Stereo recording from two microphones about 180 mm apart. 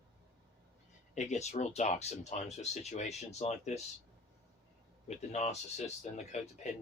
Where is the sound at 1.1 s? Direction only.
40° left (ahead or behind).